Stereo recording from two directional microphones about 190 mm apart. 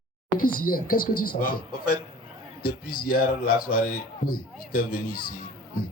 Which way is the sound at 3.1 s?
50° left (ahead or behind).